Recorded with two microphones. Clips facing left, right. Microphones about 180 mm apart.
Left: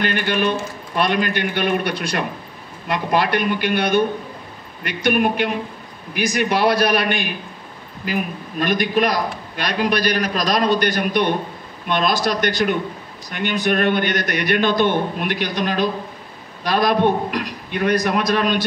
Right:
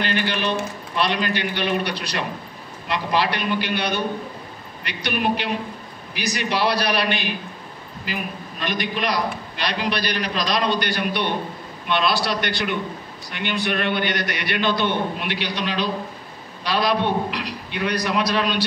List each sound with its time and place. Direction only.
0.0 s a man's voice: 50° left (ahead or behind)